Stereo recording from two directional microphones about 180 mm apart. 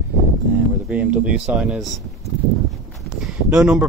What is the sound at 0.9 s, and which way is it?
Speech, 5° right (ahead or behind).